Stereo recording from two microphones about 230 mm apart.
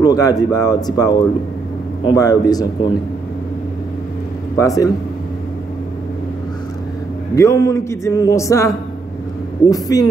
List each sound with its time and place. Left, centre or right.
0.0 s a man's voice: centre
4.6 s a man's voice: centre
7.3 s a man's voice: centre